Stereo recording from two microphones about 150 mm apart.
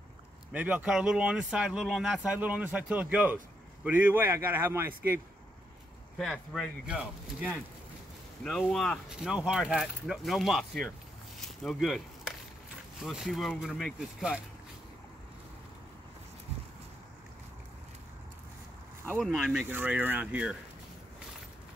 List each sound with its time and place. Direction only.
0.5 s speech: 10° right (ahead or behind)
6.1 s speech: centre (ahead or behind)
8.5 s speech: centre (ahead or behind)
11.4 s a sound: centre (ahead or behind)
13.0 s speech: centre (ahead or behind)
19.1 s speech: centre (ahead or behind)